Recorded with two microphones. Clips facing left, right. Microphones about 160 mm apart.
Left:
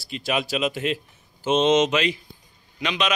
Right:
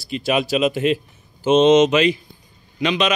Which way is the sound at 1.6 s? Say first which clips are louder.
Right 6 dB; 75° right (ahead or behind).